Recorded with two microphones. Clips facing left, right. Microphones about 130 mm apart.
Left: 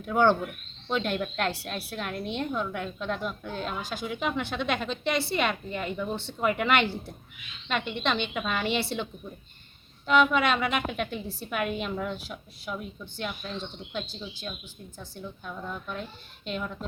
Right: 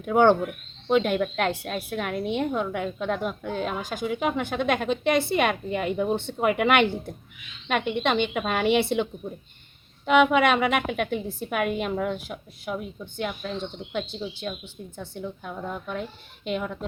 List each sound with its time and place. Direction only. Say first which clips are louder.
0.0 s a woman's voice: right 4 dB; 55° right (ahead or behind)
10.1 s a woman's voice: right 4 dB; 60° right (ahead or behind)
15.4 s a woman's voice: right 1 dB; 50° right (ahead or behind)
16.4 s a woman's voice: right 5 dB; 60° right (ahead or behind)